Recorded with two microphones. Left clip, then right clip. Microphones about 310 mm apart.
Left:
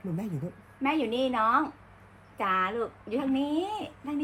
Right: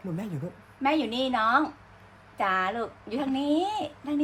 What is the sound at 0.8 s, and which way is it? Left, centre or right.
A woman's voice, right.